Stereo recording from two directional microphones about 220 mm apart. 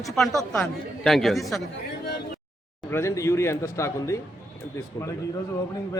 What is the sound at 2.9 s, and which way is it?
A man's voice, 15° left (ahead or behind).